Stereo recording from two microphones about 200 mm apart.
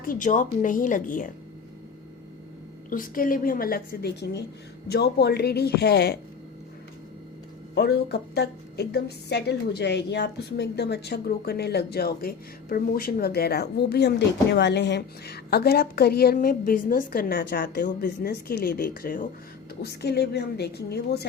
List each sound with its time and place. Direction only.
0.0 s speech: 40° left (ahead or behind)
2.9 s a woman's voice: 45° left (ahead or behind)
7.8 s a woman's voice: 55° left (ahead or behind)
19.8 s a woman's voice: 55° left (ahead or behind)